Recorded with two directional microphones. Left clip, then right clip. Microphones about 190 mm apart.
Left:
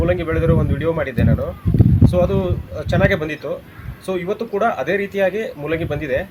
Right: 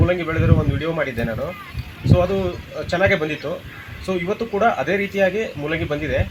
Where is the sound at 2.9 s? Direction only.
25° left (ahead or behind).